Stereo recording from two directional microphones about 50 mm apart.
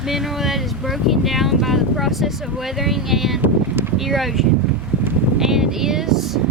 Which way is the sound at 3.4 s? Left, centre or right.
Right.